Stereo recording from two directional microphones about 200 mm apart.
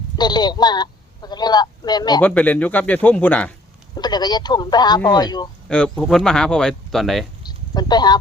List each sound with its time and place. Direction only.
0.2 s a man's voice: 20° left (ahead or behind)
2.2 s speech: 10° left (ahead or behind)
3.9 s speech: 20° left (ahead or behind)
5.6 s speech: 5° left (ahead or behind)
7.4 s a sound: 20° left (ahead or behind)